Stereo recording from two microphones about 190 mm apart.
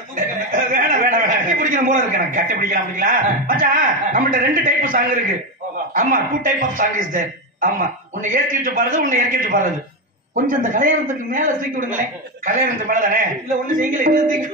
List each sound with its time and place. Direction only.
0.1 s a man's voice: 40° right (ahead or behind)
8.2 s a man's voice: 45° right (ahead or behind)